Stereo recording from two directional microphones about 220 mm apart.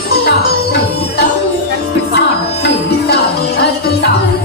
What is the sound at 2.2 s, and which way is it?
Music, 50° left (ahead or behind).